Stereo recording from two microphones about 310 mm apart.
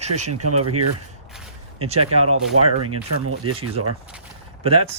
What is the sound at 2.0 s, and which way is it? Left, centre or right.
Speech, right.